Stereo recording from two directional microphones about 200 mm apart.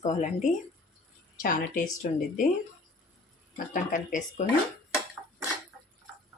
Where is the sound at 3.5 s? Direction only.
40° left (ahead or behind).